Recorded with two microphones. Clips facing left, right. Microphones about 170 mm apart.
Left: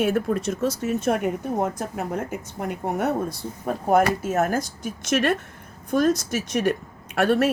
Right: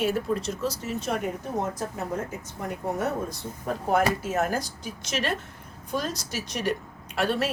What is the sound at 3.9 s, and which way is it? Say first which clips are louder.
A woman's voice: left 4 dB; 50° left (ahead or behind).